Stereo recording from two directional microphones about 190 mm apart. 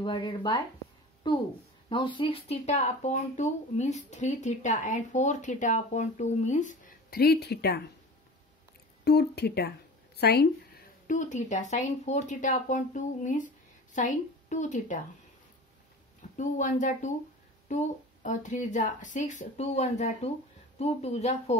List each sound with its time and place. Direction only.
0.0 s speech: 25° left (ahead or behind); by 7.8 s 60° left (ahead or behind)
9.0 s speech: 60° left (ahead or behind)
11.1 s speech: 40° left (ahead or behind)
16.2 s speech: 40° left (ahead or behind)